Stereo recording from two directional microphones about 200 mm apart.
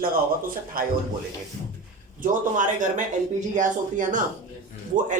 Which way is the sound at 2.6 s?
40° right (ahead or behind).